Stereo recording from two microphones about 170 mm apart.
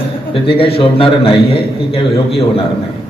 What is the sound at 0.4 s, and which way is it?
A man's voice, 30° left (ahead or behind).